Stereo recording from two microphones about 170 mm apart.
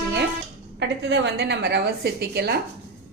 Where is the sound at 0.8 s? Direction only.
90° right; by 2.6 s 70° right (ahead or behind).